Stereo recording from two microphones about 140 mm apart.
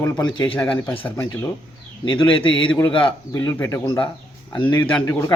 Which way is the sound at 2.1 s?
40° left (ahead or behind).